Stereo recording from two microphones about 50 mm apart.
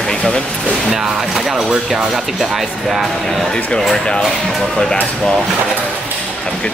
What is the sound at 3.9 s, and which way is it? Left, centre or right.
Speech, centre.